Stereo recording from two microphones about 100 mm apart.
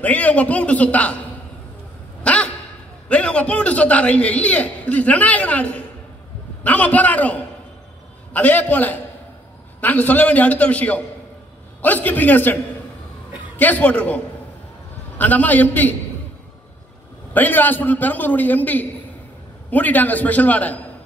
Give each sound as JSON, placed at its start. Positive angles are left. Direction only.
{"t": 0.0, "sound": "a man's voice", "side_deg": 15}
{"t": 2.2, "sound": "a sound", "side_deg": 15}
{"t": 3.1, "sound": "a man's voice", "side_deg": 10}
{"t": 13.6, "sound": "a man's voice", "side_deg": 15}
{"t": 17.3, "sound": "a man's voice", "side_deg": 20}